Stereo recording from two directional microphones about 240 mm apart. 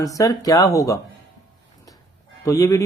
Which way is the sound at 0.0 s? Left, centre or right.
Centre.